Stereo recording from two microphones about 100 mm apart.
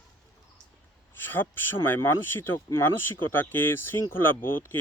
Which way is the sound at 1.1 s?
20° left (ahead or behind).